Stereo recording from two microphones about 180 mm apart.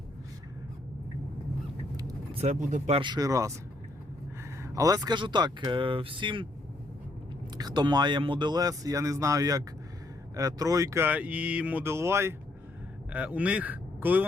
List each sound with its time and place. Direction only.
2.3 s speech: 40° right (ahead or behind)
3.0 s speech: 20° right (ahead or behind)
4.6 s speech: 20° right (ahead or behind)
7.6 s speech: 25° right (ahead or behind)